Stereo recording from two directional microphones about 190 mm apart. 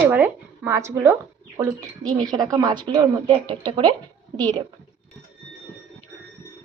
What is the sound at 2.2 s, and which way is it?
A woman's voice, 20° right (ahead or behind).